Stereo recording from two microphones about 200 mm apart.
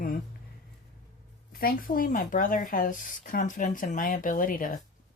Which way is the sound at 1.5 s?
45° left (ahead or behind).